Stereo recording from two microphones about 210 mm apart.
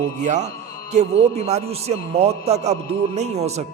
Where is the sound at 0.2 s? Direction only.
35° right (ahead or behind).